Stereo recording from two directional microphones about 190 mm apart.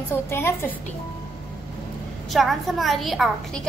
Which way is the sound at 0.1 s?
15° left (ahead or behind).